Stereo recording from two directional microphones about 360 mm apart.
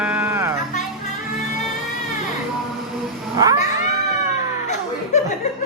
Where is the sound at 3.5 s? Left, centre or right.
Centre.